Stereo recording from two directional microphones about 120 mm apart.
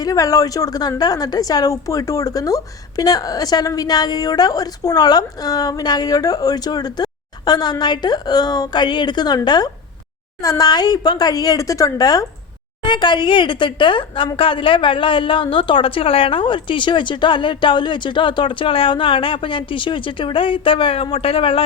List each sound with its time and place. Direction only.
0.0 s a woman's voice: 30° left (ahead or behind); by 21.6 s 50° left (ahead or behind)